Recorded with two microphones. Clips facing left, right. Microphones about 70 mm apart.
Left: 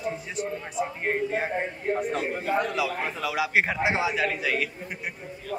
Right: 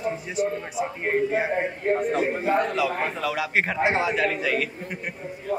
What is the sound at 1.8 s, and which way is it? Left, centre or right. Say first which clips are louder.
Speech: right 5 dB; right.